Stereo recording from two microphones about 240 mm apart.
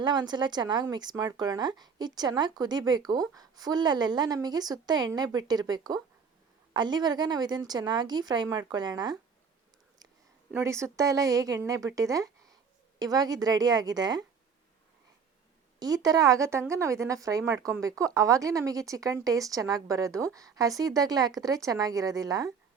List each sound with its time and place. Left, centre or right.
0.0 s speech: centre
10.5 s speech: centre
15.8 s speech: centre